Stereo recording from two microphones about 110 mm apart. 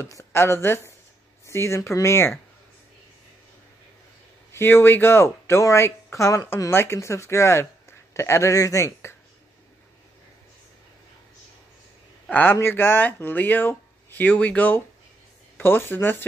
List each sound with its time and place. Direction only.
0.0 s a woman's voice: 25° left (ahead or behind)
4.5 s a woman's voice: 25° left (ahead or behind)
12.3 s speech: 15° left (ahead or behind)